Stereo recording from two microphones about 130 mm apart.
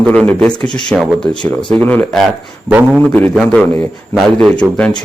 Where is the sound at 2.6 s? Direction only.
10° right (ahead or behind).